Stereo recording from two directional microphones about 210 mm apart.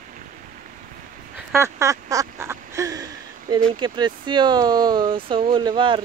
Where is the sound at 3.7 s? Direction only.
20° right (ahead or behind).